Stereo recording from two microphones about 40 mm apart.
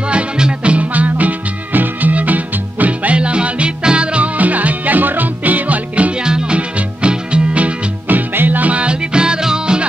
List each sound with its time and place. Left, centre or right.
0.1 s music: right
0.9 s music: right
3.2 s music: right
4.4 s music: right
6.1 s music: right
8.1 s music: right
8.7 s music: right